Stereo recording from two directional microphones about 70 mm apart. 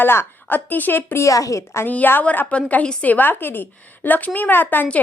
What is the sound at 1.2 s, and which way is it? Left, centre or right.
Speech, left.